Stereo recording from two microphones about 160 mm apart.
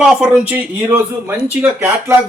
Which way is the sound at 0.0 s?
5° right (ahead or behind).